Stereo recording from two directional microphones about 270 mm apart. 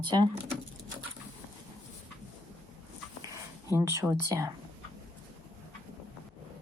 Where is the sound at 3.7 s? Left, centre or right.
Centre.